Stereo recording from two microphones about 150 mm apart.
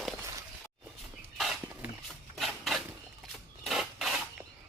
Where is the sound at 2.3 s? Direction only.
Centre (ahead or behind).